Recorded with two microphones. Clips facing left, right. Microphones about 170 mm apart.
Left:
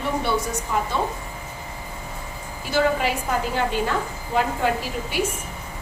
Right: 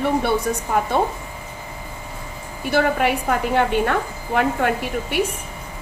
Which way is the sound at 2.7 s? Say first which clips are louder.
Right 2 dB; 60° right (ahead or behind).